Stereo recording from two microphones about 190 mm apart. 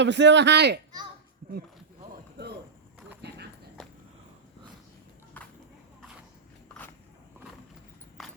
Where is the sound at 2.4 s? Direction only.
65° right (ahead or behind).